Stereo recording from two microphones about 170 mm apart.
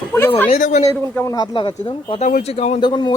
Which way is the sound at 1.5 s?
30° left (ahead or behind).